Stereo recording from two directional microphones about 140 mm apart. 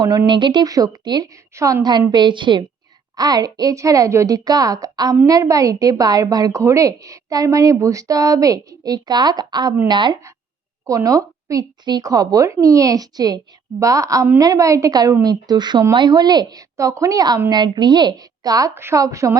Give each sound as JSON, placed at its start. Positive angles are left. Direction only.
{"t": 0.0, "sound": "a woman's voice", "side_deg": -30}